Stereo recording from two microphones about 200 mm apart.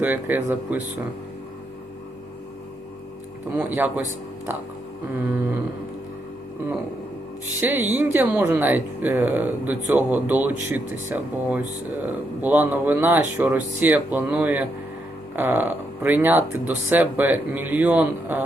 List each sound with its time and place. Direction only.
0.0 s speech: 10° right (ahead or behind)
3.5 s speech: 10° right (ahead or behind)
7.6 s speech: 10° right (ahead or behind)